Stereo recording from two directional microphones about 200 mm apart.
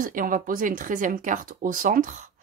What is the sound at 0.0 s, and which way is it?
Speech, 45° right (ahead or behind).